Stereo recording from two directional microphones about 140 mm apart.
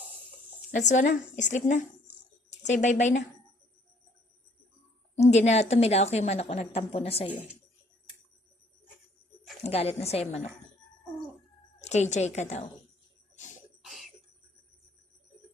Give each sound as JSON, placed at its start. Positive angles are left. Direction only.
{"t": 0.7, "sound": "a woman's voice", "side_deg": 60}
{"t": 5.1, "sound": "a woman's voice", "side_deg": 55}
{"t": 9.6, "sound": "a woman's voice", "side_deg": 45}
{"t": 11.8, "sound": "a woman's voice", "side_deg": 55}
{"t": 13.8, "sound": "cough", "side_deg": 0}